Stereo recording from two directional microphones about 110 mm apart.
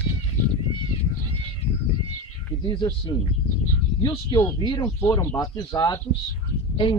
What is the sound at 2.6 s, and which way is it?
Speech, 40° left (ahead or behind).